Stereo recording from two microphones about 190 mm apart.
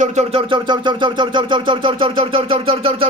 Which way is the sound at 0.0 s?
35° right (ahead or behind).